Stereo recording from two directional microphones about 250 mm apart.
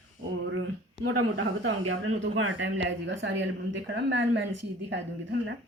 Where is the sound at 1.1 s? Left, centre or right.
Right.